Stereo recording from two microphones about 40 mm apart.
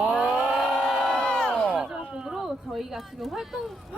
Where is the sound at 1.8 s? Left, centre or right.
Right.